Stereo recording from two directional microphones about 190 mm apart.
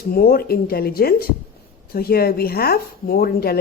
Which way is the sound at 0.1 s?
50° left (ahead or behind).